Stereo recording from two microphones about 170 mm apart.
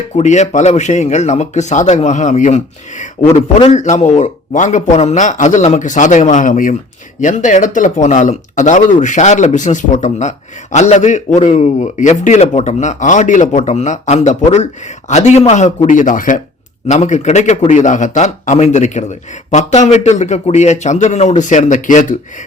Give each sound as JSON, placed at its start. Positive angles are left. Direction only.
{"t": 0.2, "sound": "speech", "side_deg": 45}